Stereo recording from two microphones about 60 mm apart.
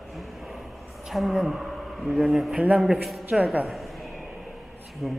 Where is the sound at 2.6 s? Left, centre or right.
Right.